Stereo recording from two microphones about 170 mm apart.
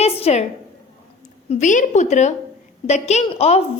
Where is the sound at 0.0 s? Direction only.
40° left (ahead or behind).